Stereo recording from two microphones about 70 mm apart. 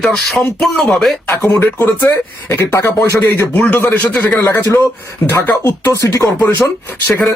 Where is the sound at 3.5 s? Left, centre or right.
Left.